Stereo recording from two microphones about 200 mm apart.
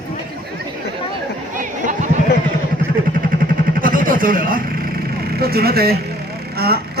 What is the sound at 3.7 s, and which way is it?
Vehicle, 45° right (ahead or behind).